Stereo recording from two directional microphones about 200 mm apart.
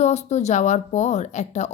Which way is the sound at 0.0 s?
35° left (ahead or behind).